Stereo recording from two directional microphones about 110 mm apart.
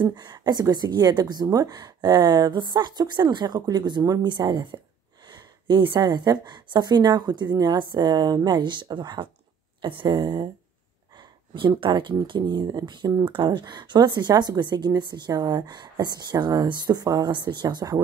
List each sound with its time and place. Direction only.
0.0 s speech: 40° right (ahead or behind)
11.1 s a sound: 50° right (ahead or behind)
11.7 s speech: 45° right (ahead or behind)